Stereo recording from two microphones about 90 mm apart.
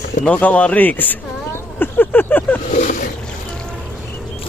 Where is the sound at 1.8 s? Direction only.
25° left (ahead or behind).